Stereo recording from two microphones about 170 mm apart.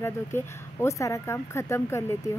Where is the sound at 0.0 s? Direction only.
15° left (ahead or behind).